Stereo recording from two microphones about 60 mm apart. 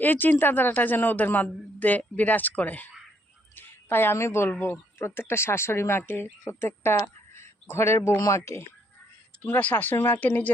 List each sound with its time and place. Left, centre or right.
0.0 s a man's voice: left
7.3 s a sound: left
8.1 s speech: left
8.4 s speech: left
9.6 s a man's voice: left